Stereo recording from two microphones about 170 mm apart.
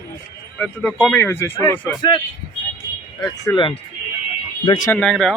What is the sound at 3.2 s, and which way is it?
Speech, 25° left (ahead or behind).